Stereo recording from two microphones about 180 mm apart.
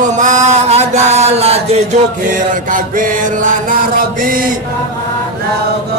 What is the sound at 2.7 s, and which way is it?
Mantra, 45° right (ahead or behind).